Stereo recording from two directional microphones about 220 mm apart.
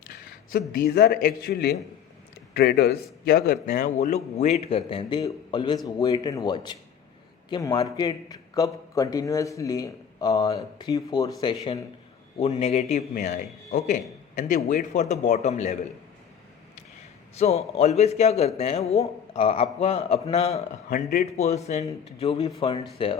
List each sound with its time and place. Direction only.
0.8 s a man's voice: 45° left (ahead or behind)
17.3 s a man's voice: 30° left (ahead or behind)